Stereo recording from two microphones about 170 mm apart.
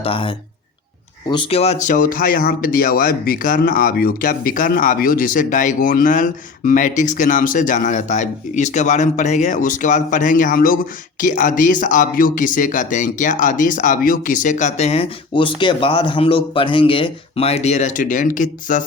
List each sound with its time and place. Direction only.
0.0 s speech: 30° left (ahead or behind); by 18.9 s 50° left (ahead or behind)